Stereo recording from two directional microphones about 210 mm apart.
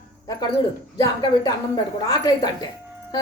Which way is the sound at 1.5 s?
15° left (ahead or behind).